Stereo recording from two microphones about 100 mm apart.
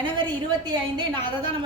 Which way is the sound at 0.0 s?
50° right (ahead or behind).